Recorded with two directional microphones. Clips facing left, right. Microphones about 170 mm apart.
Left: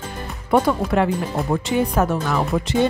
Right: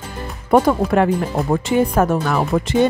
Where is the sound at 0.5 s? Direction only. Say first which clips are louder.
Right 3 dB; 45° right (ahead or behind).